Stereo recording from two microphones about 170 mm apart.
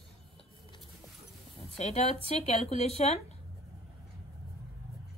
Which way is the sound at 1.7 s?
40° left (ahead or behind).